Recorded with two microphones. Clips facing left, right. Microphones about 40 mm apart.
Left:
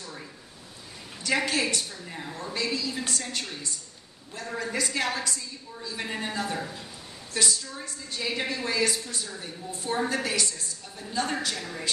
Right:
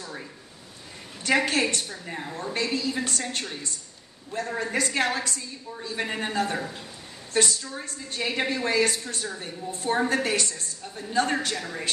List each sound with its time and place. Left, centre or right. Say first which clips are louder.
1.2 s a woman's voice: right 3 dB; right
1.9 s a woman's voice: right 3 dB; right
7.8 s a woman's voice: right 2 dB; right